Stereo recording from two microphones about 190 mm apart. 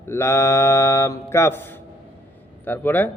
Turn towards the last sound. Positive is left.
turn(degrees=10)  # may be behind; listen again after turning